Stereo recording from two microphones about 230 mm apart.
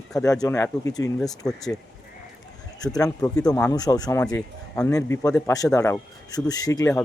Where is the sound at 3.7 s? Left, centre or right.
Centre.